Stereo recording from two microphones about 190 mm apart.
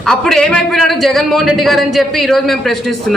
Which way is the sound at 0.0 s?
5° left (ahead or behind).